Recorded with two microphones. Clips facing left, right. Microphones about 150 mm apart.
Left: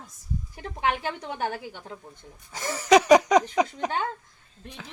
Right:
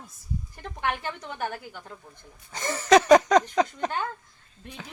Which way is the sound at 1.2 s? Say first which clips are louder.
Left 3 dB; 25° left (ahead or behind).